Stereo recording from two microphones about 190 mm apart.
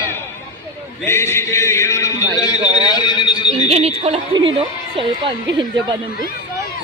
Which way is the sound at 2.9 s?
20° left (ahead or behind).